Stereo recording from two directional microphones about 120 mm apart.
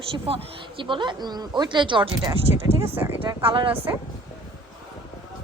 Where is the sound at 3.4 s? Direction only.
45° right (ahead or behind).